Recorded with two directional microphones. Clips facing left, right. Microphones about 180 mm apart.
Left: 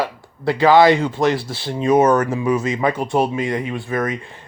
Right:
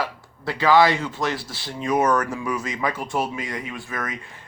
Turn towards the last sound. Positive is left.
turn(degrees=30)  # may be behind; listen again after turning